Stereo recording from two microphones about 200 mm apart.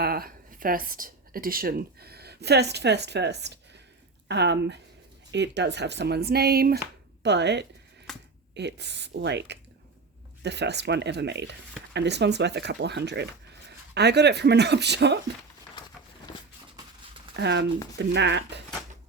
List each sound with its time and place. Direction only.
0.0 s speech: 50° right (ahead or behind)
8.1 s a sound: centre (ahead or behind)
8.5 s speech: 60° right (ahead or behind)
17.3 s speech: 60° right (ahead or behind)